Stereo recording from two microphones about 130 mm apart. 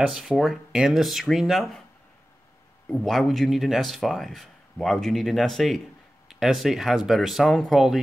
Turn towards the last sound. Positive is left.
turn(degrees=0)  # may be behind; listen again after turning